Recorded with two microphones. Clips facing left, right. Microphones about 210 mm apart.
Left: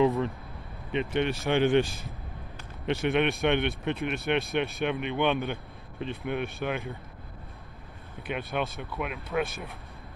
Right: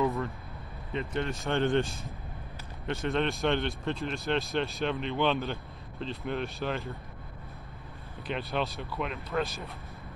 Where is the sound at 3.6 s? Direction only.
65° left (ahead or behind).